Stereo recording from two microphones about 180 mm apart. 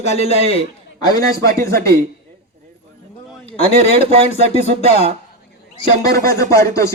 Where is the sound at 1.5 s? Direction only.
60° right (ahead or behind).